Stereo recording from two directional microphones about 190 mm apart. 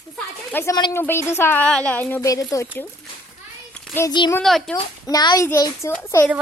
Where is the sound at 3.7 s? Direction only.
5° left (ahead or behind).